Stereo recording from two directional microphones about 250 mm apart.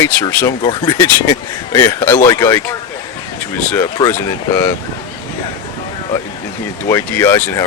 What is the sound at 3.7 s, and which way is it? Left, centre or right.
Speech, centre.